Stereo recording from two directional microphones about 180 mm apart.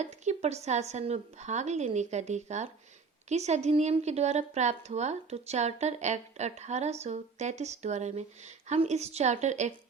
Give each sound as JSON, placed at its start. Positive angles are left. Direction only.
{"t": 0.0, "sound": "a woman's voice", "side_deg": -40}